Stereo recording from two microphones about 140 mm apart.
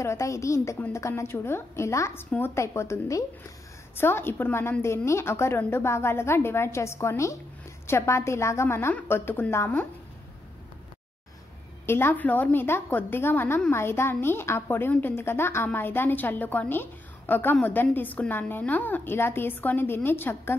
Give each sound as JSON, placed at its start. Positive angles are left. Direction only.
{"t": 0.0, "sound": "a woman's voice", "side_deg": 20}
{"t": 11.8, "sound": "a woman's voice", "side_deg": 15}